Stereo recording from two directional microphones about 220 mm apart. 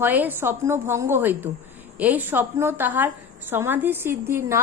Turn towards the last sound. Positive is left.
turn(degrees=-10)  # may be behind; listen again after turning